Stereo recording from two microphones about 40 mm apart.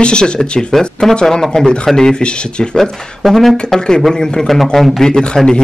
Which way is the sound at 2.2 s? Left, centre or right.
Left.